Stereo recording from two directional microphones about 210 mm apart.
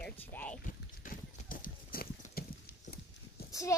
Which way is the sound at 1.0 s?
40° left (ahead or behind).